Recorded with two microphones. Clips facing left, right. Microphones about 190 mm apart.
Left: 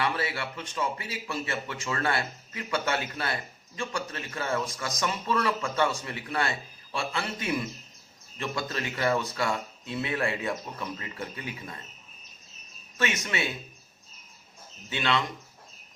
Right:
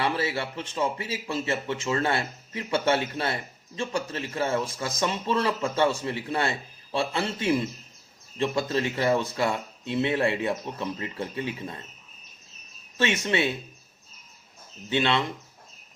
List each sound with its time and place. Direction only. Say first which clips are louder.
0.0 s speech: right 3 dB; 25° right (ahead or behind)
13.0 s speech: right 5 dB; 25° right (ahead or behind)
14.8 s speech: right 4 dB; 25° right (ahead or behind)